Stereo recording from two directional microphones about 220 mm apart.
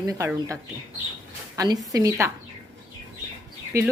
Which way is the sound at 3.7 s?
15° right (ahead or behind).